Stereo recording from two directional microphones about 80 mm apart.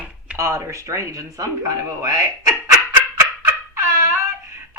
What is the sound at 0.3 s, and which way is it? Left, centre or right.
Speech, right.